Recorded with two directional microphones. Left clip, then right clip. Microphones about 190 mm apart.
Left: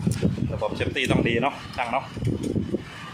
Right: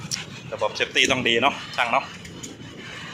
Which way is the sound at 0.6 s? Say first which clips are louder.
Right 6 dB; 15° left (ahead or behind).